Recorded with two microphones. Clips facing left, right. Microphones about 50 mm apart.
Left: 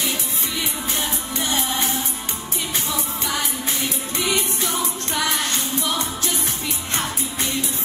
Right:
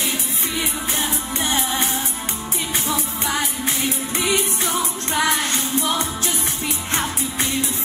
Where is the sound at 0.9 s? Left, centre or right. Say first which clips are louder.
Right 2 dB; right.